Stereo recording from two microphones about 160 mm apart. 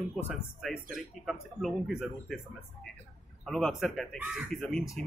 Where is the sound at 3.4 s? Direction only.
Centre (ahead or behind).